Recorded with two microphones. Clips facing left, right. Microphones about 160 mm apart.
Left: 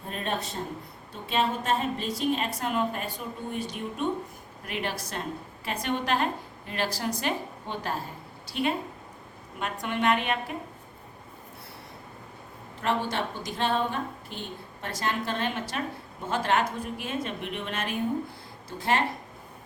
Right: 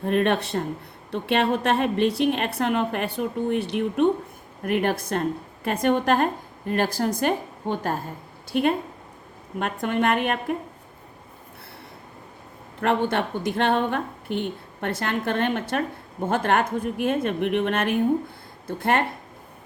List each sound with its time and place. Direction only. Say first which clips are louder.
0.1 s a woman's voice: right 10 dB; 70° right (ahead or behind)
4.6 s a woman's voice: right 10 dB; 50° right (ahead or behind)
12.8 s a woman's voice: right 6 dB; 60° right (ahead or behind)